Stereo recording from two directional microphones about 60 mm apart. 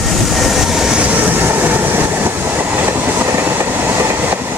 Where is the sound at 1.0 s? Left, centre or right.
Right.